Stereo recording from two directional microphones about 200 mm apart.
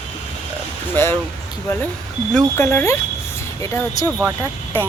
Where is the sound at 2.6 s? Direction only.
10° left (ahead or behind).